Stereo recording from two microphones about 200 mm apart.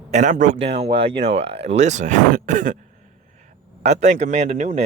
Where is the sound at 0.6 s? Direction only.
30° right (ahead or behind).